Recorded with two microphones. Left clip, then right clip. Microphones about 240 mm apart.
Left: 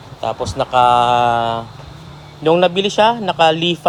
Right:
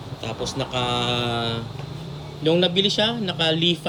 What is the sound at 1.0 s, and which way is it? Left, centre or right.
Mantra, centre.